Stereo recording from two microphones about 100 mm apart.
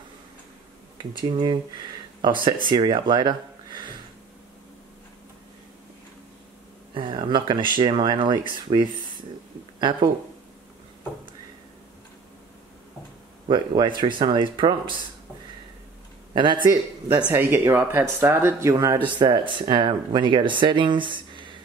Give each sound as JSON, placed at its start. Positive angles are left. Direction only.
{"t": 1.1, "sound": "speech", "side_deg": -50}
{"t": 6.9, "sound": "speech", "side_deg": -55}
{"t": 13.5, "sound": "speech", "side_deg": -50}
{"t": 16.3, "sound": "speech", "side_deg": -55}
{"t": 17.3, "sound": "speech", "side_deg": -25}
{"t": 18.9, "sound": "speech", "side_deg": -50}